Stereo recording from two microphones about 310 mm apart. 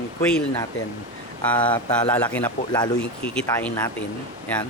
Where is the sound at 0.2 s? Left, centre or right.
Centre.